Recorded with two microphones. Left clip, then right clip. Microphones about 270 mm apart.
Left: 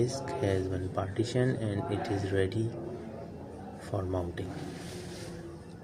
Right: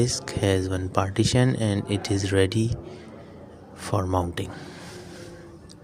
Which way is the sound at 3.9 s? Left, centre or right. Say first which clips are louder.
Right 9 dB; right.